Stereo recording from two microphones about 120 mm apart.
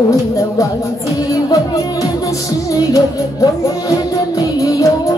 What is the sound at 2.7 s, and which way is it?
Music, 30° left (ahead or behind).